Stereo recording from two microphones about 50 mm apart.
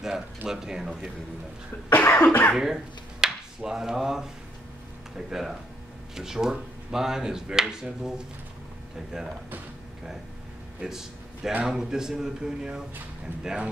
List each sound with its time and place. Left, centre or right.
0.5 s speech: centre
1.9 s cough: left
2.5 s speech: centre
10.8 s speech: centre